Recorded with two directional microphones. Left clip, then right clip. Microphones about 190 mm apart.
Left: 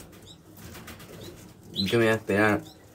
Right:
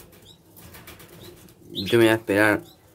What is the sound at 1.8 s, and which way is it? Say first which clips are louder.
Speech: right 5 dB; 40° right (ahead or behind).